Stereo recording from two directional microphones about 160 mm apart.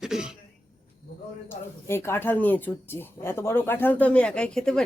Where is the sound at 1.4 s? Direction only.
15° left (ahead or behind).